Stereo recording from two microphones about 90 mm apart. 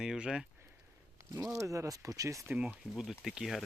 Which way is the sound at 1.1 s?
35° right (ahead or behind).